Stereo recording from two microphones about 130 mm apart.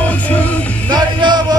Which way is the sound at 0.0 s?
10° left (ahead or behind).